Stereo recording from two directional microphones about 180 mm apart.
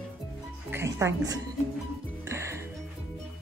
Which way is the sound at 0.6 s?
15° right (ahead or behind).